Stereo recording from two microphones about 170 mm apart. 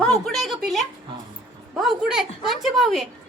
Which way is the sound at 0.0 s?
5° left (ahead or behind).